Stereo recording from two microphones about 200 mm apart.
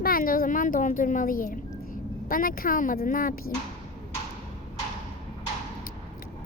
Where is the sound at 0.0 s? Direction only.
45° left (ahead or behind).